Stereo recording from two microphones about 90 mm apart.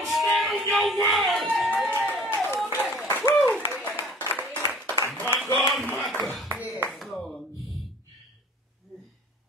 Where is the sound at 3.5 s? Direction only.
20° left (ahead or behind).